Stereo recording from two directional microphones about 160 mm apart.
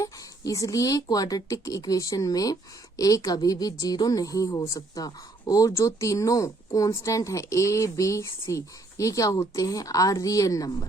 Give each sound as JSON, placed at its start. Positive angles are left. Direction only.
{"t": 0.0, "sound": "a woman's voice", "side_deg": 20}